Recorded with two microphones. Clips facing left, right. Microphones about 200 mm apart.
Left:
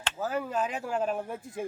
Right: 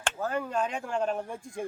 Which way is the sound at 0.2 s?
5° left (ahead or behind).